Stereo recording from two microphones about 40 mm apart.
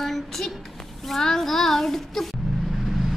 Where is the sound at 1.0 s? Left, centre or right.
Centre.